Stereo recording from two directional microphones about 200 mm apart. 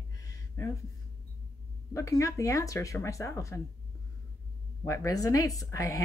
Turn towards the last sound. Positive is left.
turn(degrees=15)  # may be behind; listen again after turning